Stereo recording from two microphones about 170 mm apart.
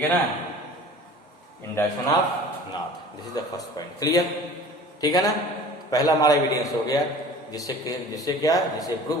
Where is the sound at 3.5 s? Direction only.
20° left (ahead or behind).